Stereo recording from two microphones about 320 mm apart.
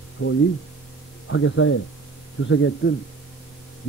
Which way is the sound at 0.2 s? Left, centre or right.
Left.